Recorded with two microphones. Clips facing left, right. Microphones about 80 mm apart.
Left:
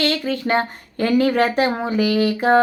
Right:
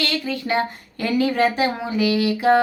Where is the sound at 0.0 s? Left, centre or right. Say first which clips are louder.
Left 4 dB; left.